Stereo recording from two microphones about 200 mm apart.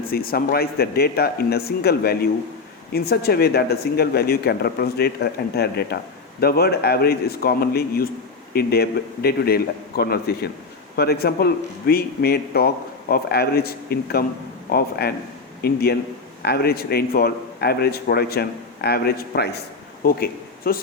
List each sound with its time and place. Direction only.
0.1 s a man's voice: 50° left (ahead or behind)